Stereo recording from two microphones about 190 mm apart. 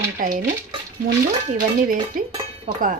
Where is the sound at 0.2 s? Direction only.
45° right (ahead or behind).